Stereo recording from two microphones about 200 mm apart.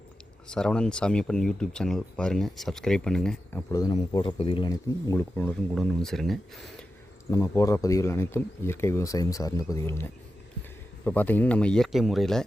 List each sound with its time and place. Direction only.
0.5 s speech: 5° left (ahead or behind)
3.7 s speech: 20° left (ahead or behind); by 6.8 s centre (ahead or behind)
7.3 s speech: 15° left (ahead or behind)